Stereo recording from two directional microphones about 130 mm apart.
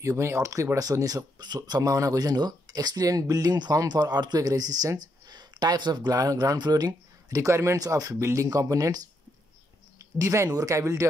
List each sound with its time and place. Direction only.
0.0 s speech: 25° right (ahead or behind)
10.1 s speech: 25° right (ahead or behind)